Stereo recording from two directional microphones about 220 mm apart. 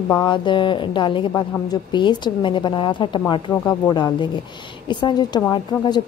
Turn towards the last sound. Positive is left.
turn(degrees=20)  # may be behind; listen again after turning